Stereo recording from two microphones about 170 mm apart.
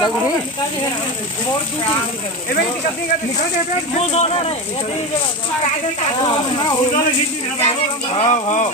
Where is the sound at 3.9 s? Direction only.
40° left (ahead or behind).